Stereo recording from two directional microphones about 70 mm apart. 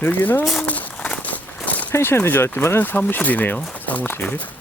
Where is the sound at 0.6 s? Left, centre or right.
Left.